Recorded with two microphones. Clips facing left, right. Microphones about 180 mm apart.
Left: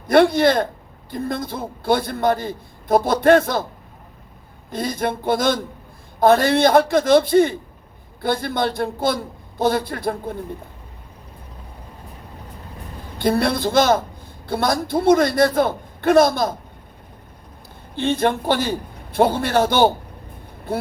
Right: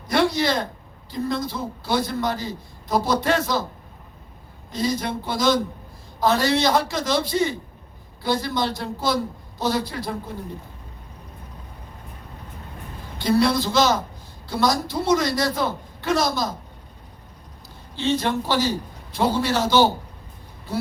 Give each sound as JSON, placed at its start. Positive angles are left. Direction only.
{"t": 0.1, "sound": "a man's voice", "side_deg": 55}
{"t": 4.7, "sound": "a man's voice", "side_deg": 55}
{"t": 13.1, "sound": "a man's voice", "side_deg": 55}
{"t": 17.9, "sound": "a man's voice", "side_deg": 55}